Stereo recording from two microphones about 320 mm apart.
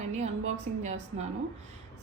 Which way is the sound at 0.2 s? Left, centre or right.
Right.